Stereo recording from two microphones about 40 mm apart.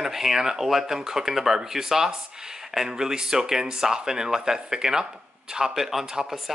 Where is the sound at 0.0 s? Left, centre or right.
Centre.